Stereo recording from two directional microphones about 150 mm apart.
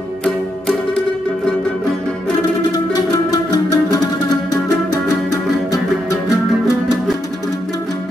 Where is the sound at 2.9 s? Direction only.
25° left (ahead or behind).